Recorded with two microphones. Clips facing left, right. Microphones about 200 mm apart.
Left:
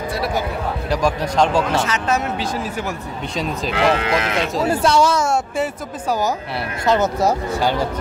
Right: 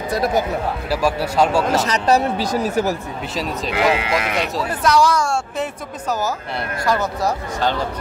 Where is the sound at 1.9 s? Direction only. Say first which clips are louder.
Right 4 dB; 35° right (ahead or behind).